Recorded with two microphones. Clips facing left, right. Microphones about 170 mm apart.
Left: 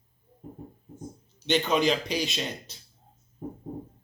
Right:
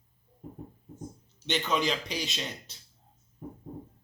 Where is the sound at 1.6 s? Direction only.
15° left (ahead or behind).